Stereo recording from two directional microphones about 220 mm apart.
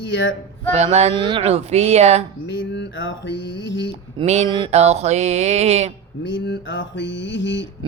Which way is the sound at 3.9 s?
30° right (ahead or behind).